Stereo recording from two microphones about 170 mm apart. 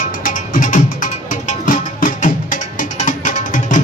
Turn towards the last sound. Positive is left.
turn(degrees=45)  # may be behind; listen again after turning